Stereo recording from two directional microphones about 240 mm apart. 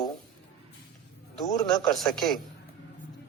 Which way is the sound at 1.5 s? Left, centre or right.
Centre.